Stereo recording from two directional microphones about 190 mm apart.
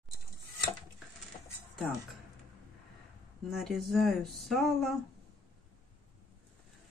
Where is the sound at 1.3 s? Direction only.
35° left (ahead or behind).